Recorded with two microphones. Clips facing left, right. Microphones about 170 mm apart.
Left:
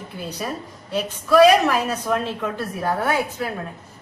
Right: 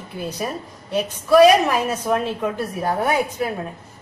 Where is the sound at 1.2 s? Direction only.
15° right (ahead or behind).